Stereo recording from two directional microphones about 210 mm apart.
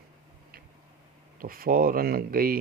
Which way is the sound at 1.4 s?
45° right (ahead or behind).